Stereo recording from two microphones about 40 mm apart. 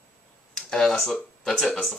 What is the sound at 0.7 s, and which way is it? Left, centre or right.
Speech, centre.